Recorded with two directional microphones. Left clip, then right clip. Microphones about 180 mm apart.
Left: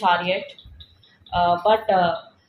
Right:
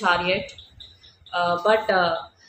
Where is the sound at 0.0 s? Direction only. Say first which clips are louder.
Left 1 dB; 30° right (ahead or behind).